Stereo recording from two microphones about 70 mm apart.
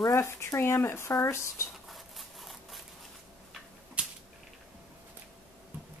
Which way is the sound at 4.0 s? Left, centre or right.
Centre.